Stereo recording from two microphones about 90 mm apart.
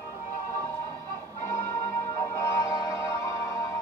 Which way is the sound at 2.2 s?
40° left (ahead or behind).